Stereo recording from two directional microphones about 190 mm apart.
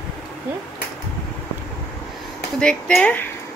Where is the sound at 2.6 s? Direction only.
5° left (ahead or behind).